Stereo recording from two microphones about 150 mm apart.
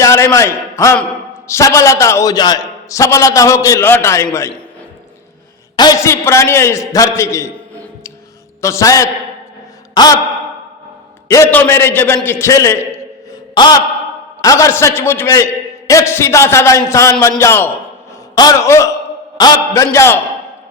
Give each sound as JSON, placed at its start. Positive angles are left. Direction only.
{"t": 0.0, "sound": "a man's voice", "side_deg": 20}
{"t": 5.7, "sound": "a man's voice", "side_deg": 25}
{"t": 9.9, "sound": "sigh", "side_deg": 25}
{"t": 11.3, "sound": "a man's voice", "side_deg": 15}
{"t": 13.5, "sound": "a sound", "side_deg": 30}
{"t": 14.4, "sound": "a man's voice", "side_deg": 20}